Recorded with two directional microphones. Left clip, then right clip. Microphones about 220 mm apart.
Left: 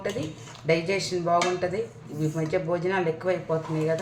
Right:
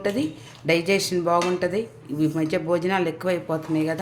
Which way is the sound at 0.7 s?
50° right (ahead or behind).